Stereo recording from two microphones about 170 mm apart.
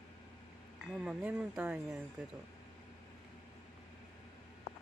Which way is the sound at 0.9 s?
5° right (ahead or behind).